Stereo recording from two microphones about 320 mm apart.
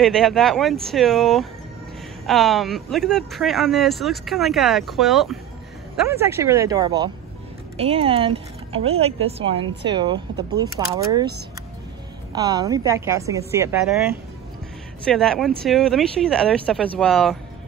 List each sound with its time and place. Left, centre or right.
0.0 s a woman's voice: centre
12.3 s a woman's voice: centre
15.0 s speech: centre